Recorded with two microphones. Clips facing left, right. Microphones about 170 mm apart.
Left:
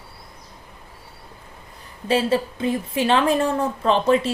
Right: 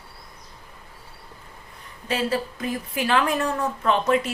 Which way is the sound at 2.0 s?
30° left (ahead or behind).